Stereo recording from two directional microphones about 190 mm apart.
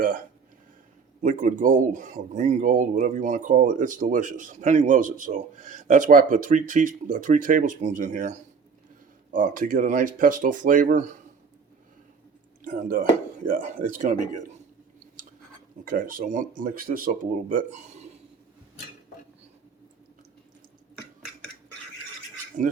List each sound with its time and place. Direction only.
1.2 s speech: 45° right (ahead or behind)
12.6 s speech: 45° right (ahead or behind)
15.8 s speech: 45° right (ahead or behind)